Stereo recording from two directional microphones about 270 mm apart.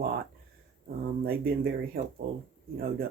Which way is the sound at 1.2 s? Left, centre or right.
Right.